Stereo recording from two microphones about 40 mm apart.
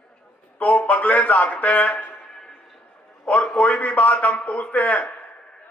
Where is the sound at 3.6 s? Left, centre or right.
Left.